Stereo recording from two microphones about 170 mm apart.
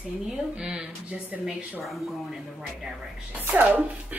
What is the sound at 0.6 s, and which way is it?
Speech, 5° right (ahead or behind).